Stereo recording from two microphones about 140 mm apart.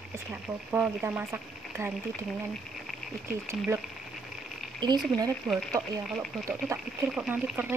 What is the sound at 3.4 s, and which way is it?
Speech, 15° right (ahead or behind).